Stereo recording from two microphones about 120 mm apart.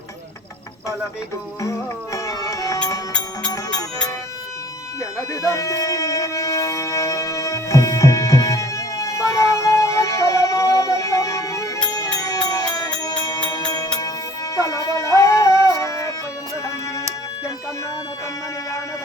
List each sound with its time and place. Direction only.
2.1 s music: 30° left (ahead or behind)
5.3 s music: 25° left (ahead or behind)